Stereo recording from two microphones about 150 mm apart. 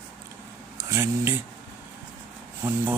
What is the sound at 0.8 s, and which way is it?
Speech, 20° right (ahead or behind).